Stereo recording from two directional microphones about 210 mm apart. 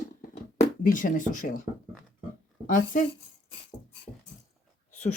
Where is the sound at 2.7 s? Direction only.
40° left (ahead or behind).